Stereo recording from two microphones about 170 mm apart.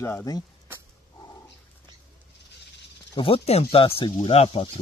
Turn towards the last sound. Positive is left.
turn(degrees=35)  # may be behind; listen again after turning